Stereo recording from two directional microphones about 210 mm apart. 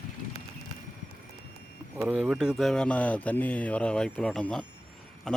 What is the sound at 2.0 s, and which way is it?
Speech, 5° right (ahead or behind).